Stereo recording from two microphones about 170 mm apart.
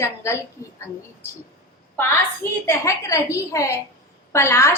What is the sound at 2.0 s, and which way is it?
A woman's voice, 15° left (ahead or behind).